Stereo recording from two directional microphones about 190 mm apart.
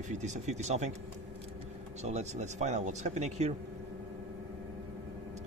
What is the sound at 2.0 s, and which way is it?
Speech, 35° right (ahead or behind).